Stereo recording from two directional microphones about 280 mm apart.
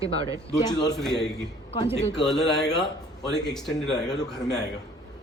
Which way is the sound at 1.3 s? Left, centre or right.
Centre.